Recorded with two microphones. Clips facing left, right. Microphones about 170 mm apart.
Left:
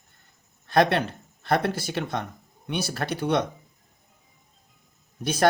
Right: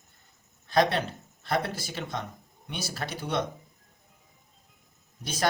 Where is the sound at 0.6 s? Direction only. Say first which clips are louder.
Left 3 dB; 60° left (ahead or behind).